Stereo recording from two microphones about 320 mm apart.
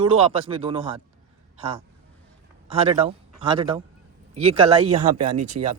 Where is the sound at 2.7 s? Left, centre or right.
Centre.